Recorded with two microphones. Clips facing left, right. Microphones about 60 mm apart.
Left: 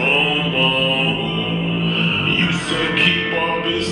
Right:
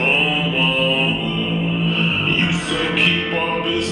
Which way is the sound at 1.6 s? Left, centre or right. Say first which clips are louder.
Even; centre.